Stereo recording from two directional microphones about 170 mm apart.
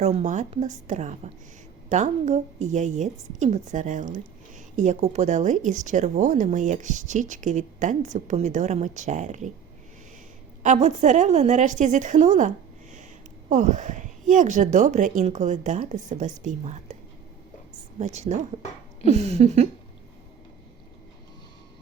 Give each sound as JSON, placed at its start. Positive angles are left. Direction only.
{"t": 0.0, "sound": "a woman's voice", "side_deg": -40}
{"t": 10.6, "sound": "a woman's voice", "side_deg": -45}
{"t": 18.0, "sound": "a sound", "side_deg": -40}